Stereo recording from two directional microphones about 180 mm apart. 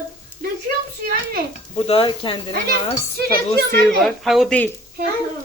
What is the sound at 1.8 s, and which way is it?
Speech, 30° left (ahead or behind).